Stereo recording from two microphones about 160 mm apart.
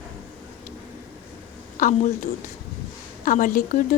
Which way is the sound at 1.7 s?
55° left (ahead or behind).